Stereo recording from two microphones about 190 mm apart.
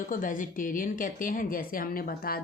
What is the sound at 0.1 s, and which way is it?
A woman's voice, 45° left (ahead or behind).